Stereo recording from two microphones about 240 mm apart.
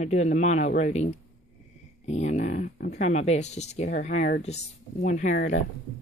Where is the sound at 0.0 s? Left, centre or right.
Left.